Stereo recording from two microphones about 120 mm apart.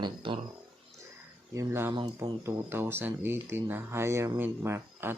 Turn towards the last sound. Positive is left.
turn(degrees=-20)  # may be behind; listen again after turning